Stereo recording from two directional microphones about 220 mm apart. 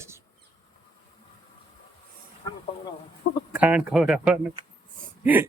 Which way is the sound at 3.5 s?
5° right (ahead or behind).